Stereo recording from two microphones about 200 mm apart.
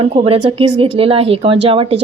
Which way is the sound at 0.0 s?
25° right (ahead or behind).